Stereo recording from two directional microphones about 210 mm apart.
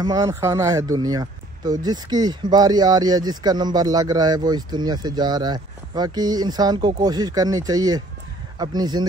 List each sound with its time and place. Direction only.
0.0 s speech: 20° right (ahead or behind)